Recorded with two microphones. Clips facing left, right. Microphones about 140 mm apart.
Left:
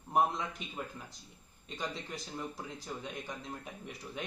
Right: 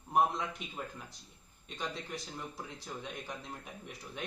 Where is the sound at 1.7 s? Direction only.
Centre (ahead or behind).